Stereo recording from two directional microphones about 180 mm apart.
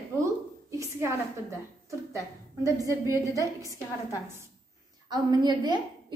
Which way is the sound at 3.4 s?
20° left (ahead or behind).